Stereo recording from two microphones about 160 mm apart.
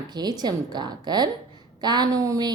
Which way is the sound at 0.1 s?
25° right (ahead or behind).